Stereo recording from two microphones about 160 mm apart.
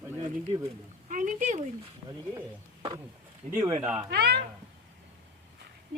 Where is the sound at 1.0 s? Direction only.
55° right (ahead or behind).